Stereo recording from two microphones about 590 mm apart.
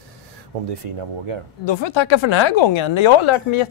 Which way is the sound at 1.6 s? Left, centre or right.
Left.